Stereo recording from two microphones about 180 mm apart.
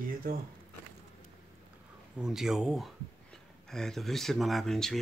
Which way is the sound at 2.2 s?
5° right (ahead or behind).